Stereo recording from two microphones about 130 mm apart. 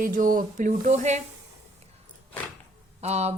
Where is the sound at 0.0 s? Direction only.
90° right; by 1.2 s 65° right (ahead or behind).